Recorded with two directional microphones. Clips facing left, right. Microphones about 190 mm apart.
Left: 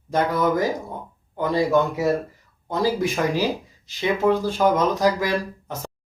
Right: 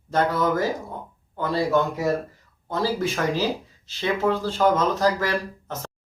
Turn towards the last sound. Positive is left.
turn(degrees=15)  # may be behind; listen again after turning